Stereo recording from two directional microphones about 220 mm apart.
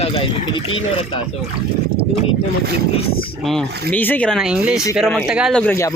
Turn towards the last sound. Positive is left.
turn(degrees=10)  # may be behind; listen again after turning